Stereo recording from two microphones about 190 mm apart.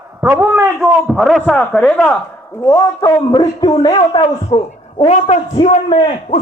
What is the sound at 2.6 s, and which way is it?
A woman's voice, 20° left (ahead or behind).